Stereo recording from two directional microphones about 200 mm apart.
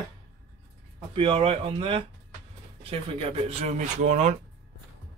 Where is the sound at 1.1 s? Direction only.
25° right (ahead or behind).